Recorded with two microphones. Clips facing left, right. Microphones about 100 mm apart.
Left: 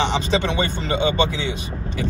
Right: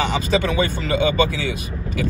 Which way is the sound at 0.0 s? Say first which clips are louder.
Right 1 dB; 30° left (ahead or behind).